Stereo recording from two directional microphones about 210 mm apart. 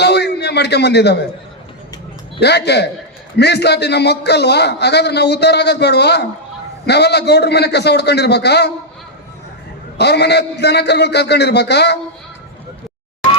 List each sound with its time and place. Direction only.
0.0 s a sound: 50° left (ahead or behind)
2.4 s a man's voice: 50° left (ahead or behind)
10.0 s a man's voice: 55° left (ahead or behind)